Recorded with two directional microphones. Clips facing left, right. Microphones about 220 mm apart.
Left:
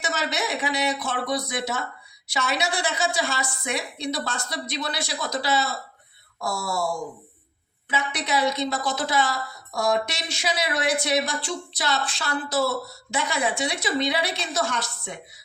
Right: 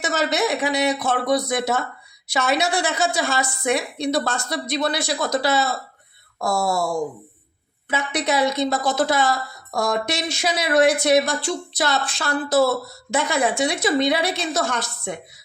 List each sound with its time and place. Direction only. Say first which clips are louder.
0.0 s speech: right 6 dB; 45° right (ahead or behind)
7.9 s speech: right 5 dB; 45° right (ahead or behind)